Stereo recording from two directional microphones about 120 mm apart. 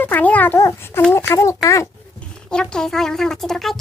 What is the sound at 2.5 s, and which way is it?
A child's voice, 5° left (ahead or behind).